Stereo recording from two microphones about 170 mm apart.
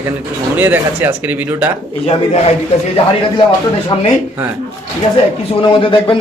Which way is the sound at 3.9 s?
30° left (ahead or behind).